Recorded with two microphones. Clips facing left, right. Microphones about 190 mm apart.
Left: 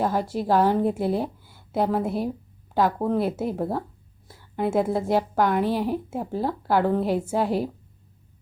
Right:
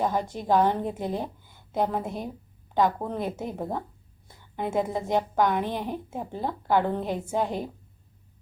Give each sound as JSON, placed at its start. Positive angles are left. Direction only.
{"t": 0.0, "sound": "a woman's voice", "side_deg": 5}